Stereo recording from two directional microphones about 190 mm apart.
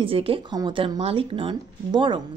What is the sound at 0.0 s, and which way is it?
Speech, 30° right (ahead or behind).